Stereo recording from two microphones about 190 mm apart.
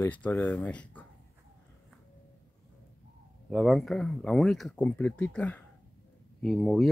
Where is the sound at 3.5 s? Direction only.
Centre (ahead or behind).